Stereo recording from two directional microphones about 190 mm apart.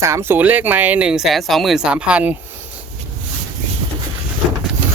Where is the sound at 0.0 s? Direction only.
15° right (ahead or behind).